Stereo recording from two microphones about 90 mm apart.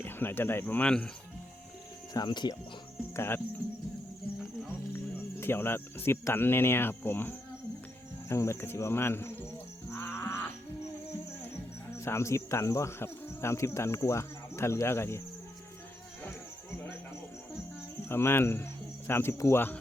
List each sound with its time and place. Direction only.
0.0 s speech: 25° left (ahead or behind)
0.9 s speech: 10° left (ahead or behind)
2.1 s speech: 55° left (ahead or behind)
3.2 s cricket: 25° left (ahead or behind)
5.4 s cricket: 25° left (ahead or behind)
9.9 s music: 25° left (ahead or behind)
11.9 s cricket: 30° left (ahead or behind)
18.1 s speech: 25° left (ahead or behind)